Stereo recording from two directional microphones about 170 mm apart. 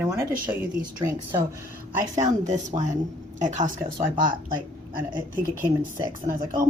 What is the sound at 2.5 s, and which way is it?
Speech, 45° right (ahead or behind).